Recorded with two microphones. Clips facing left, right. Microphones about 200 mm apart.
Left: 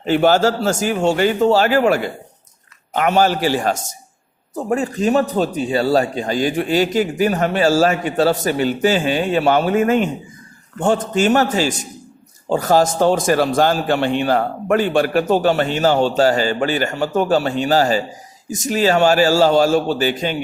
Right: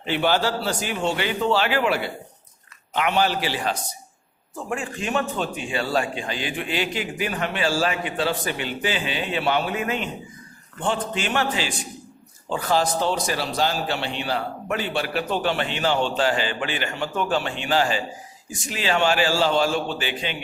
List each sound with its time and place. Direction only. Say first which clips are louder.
0.0 s a man's voice: left 8 dB; 45° left (ahead or behind)